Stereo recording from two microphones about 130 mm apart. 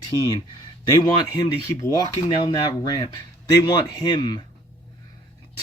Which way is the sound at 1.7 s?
25° left (ahead or behind).